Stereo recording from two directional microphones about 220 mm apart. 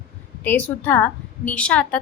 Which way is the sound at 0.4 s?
5° left (ahead or behind).